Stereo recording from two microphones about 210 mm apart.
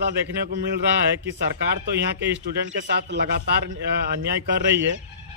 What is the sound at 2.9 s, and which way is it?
Speech, 55° right (ahead or behind).